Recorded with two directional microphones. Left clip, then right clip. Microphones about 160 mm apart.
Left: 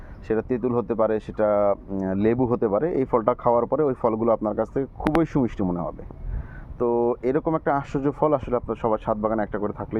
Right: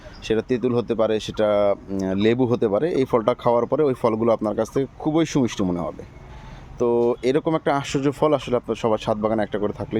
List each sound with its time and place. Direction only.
0.3 s speech: 15° right (ahead or behind)
6.7 s speech: 25° right (ahead or behind)